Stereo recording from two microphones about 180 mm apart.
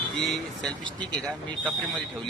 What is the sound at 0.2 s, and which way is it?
Speech, 5° left (ahead or behind).